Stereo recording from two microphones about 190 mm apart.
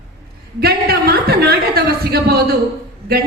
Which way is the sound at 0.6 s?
55° right (ahead or behind).